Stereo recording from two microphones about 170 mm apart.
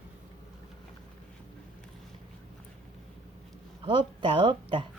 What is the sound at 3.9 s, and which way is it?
Speech, 30° right (ahead or behind).